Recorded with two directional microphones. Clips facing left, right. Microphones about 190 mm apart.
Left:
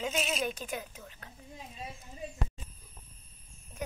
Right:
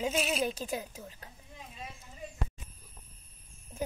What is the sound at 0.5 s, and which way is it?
Speech, 30° right (ahead or behind).